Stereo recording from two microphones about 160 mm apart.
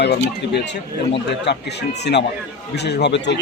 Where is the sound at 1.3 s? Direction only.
90° left.